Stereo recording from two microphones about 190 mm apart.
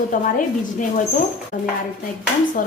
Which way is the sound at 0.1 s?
45° left (ahead or behind).